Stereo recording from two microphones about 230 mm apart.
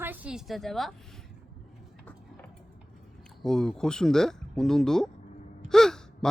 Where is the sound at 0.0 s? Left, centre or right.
Centre.